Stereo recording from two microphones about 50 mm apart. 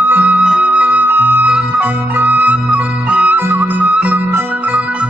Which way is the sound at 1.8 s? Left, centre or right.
Right.